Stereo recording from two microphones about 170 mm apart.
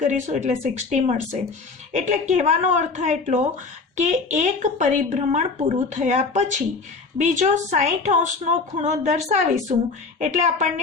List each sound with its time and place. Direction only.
0.0 s a woman's voice: 45° right (ahead or behind)